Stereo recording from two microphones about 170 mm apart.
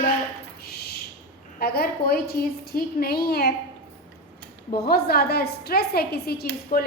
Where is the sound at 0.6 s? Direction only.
70° left (ahead or behind).